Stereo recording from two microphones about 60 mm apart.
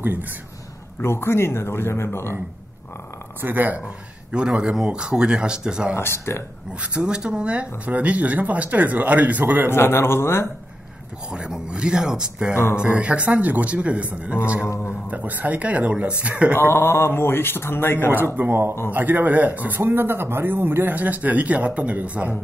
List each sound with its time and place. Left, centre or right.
0.0 s a man's voice: right
1.0 s speech: left
3.3 s speech: right
4.3 s speech: centre
5.9 s speech: left
6.8 s speech: centre
9.7 s speech: left
11.3 s speech: centre
12.5 s speech: left
12.8 s speech: centre
16.5 s speech: left
18.1 s speech: right
19.8 s speech: right